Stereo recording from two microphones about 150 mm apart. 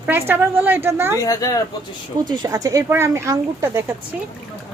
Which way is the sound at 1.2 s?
20° left (ahead or behind).